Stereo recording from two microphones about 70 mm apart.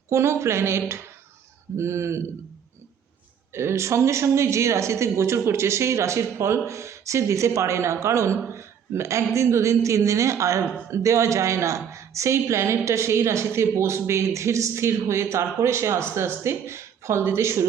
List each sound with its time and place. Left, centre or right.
0.1 s a woman's voice: right
3.5 s a woman's voice: right